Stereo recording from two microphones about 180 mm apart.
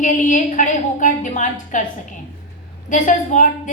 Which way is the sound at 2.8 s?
45° left (ahead or behind).